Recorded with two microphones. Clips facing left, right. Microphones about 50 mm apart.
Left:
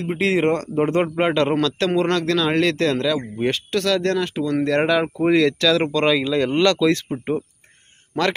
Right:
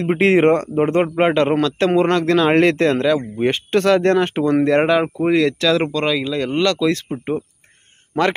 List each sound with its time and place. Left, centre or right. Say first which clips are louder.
0.0 s speech: right 5 dB; right
0.7 s speech: right 3 dB; centre
3.7 s speech: right 7 dB; right
4.6 s speech: right 3 dB; right
5.9 s speech: left 1 dB; centre